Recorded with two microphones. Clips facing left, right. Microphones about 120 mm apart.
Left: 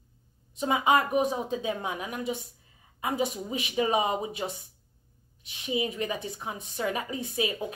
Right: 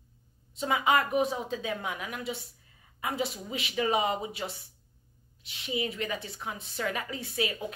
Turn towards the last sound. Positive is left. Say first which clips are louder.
# left 2 dB
turn(degrees=20)  # may be behind; listen again after turning